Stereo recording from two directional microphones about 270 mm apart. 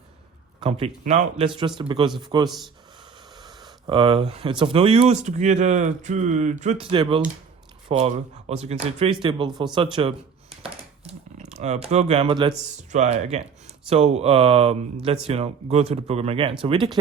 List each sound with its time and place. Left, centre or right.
0.6 s a man's voice: right